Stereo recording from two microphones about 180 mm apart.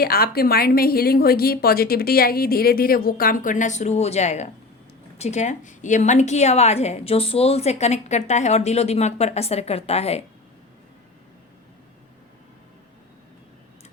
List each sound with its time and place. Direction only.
0.0 s a woman's voice: 55° left (ahead or behind); by 10.2 s 35° left (ahead or behind)